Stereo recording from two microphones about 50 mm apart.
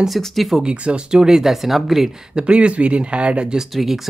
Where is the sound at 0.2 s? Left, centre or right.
Centre.